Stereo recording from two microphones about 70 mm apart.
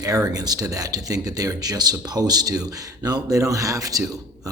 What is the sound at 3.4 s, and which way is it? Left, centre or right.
Speech, right.